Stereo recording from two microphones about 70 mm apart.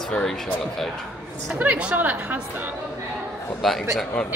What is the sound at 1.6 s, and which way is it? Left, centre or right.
Speech, right.